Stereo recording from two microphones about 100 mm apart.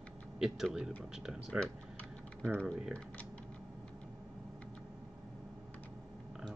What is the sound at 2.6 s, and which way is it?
Speech, 10° left (ahead or behind).